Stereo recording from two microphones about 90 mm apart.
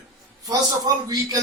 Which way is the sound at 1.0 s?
45° right (ahead or behind).